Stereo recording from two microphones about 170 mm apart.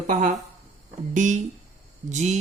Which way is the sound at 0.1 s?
50° right (ahead or behind).